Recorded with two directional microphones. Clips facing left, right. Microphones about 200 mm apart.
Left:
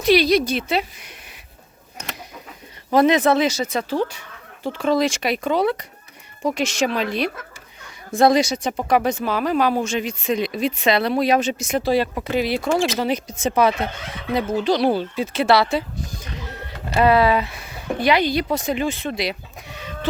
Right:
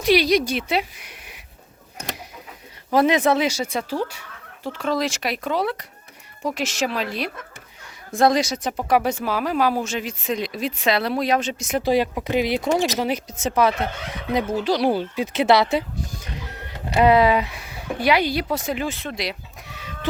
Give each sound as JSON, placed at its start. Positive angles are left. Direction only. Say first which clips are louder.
{"t": 0.0, "sound": "speech", "louder": "left 2 dB", "side_deg": -10}
{"t": 2.9, "sound": "speech", "louder": "left 2 dB", "side_deg": -10}
{"t": 11.8, "sound": "speech", "louder": "right 1 dB", "side_deg": -15}
{"t": 13.0, "sound": "speech", "louder": "left 2 dB", "side_deg": -10}
{"t": 16.9, "sound": "speech", "louder": "even", "side_deg": -15}